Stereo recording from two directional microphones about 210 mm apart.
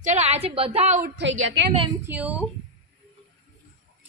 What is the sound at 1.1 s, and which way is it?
Speech, 60° right (ahead or behind).